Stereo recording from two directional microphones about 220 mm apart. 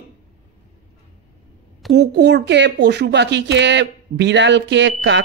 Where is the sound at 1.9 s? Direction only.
50° right (ahead or behind).